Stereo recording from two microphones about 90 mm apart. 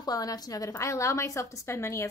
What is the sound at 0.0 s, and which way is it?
A woman's voice, 45° left (ahead or behind).